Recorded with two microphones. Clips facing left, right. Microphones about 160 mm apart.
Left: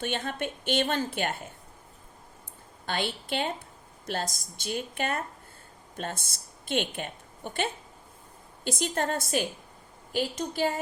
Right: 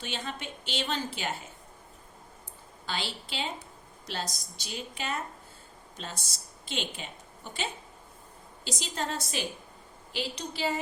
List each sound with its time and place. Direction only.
0.0 s a woman's voice: 55° left (ahead or behind)
2.8 s a woman's voice: 55° left (ahead or behind)